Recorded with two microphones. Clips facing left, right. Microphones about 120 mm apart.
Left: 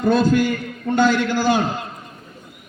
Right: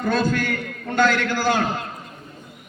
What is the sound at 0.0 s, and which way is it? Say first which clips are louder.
A man's voice: left 5 dB; 15° left (ahead or behind).